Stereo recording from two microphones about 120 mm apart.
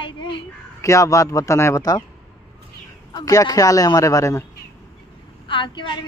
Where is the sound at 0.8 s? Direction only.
25° left (ahead or behind).